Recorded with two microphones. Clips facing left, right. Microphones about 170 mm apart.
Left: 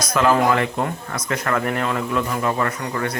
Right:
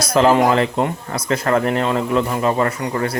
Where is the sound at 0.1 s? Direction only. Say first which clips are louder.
Right 4 dB; 30° right (ahead or behind).